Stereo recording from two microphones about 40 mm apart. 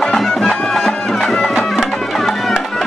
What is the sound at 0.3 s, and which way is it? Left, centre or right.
Music, left.